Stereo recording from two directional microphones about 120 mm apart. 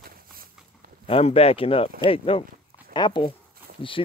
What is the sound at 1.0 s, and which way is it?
Speech, 55° left (ahead or behind).